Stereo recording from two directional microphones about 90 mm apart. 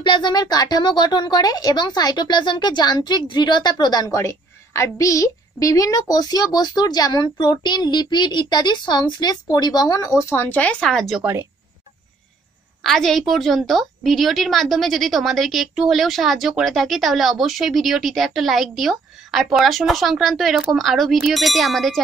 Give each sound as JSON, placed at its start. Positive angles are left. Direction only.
{"t": 0.0, "sound": "a woman's voice", "side_deg": 55}
{"t": 4.1, "sound": "a woman's voice", "side_deg": 30}
{"t": 10.3, "sound": "speech", "side_deg": 20}
{"t": 12.8, "sound": "a woman's voice", "side_deg": 0}